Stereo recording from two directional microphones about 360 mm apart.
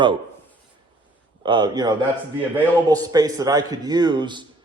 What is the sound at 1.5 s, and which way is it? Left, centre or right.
A man's voice, centre.